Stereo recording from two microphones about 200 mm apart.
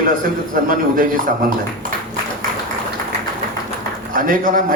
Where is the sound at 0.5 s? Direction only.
45° right (ahead or behind).